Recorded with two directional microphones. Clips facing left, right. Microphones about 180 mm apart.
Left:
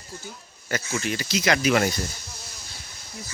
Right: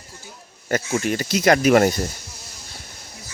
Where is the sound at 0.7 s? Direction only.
50° right (ahead or behind).